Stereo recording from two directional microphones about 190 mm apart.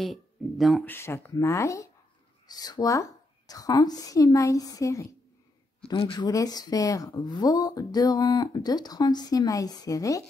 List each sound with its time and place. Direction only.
0.0 s speech: centre (ahead or behind)
0.8 s speech: 10° left (ahead or behind)